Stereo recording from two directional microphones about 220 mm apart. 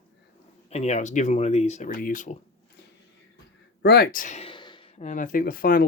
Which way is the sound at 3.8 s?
45° left (ahead or behind).